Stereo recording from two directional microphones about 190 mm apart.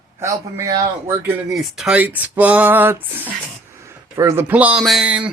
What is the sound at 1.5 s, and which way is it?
Speech, centre (ahead or behind).